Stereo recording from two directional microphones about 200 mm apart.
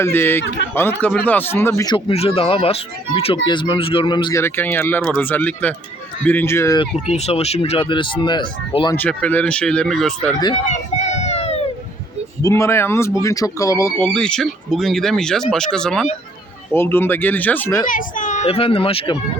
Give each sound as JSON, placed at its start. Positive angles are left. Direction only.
{"t": 0.0, "sound": "speech", "side_deg": 10}
{"t": 6.9, "sound": "speech", "side_deg": 30}
{"t": 9.0, "sound": "speech", "side_deg": 5}
{"t": 10.7, "sound": "run", "side_deg": 35}
{"t": 12.4, "sound": "speech", "side_deg": 15}
{"t": 17.8, "sound": "speech", "side_deg": 40}